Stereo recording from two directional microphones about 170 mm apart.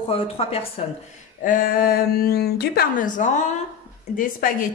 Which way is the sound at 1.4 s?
55° left (ahead or behind).